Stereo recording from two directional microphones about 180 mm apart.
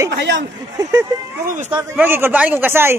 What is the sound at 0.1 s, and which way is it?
Speech, 75° right (ahead or behind).